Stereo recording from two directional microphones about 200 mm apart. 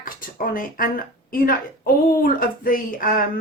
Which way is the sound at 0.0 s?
45° left (ahead or behind).